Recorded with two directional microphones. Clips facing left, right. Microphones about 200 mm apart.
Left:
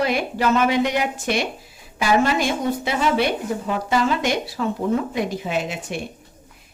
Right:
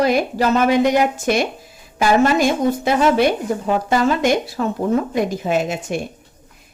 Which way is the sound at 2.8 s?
45° right (ahead or behind).